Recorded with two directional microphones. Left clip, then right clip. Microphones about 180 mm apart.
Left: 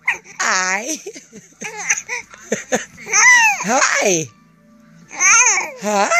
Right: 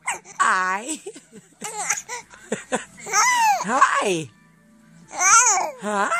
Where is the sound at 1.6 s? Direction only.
15° right (ahead or behind).